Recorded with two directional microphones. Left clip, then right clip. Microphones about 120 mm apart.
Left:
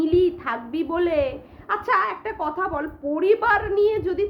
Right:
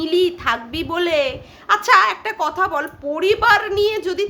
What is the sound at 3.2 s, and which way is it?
A woman's voice, 15° right (ahead or behind).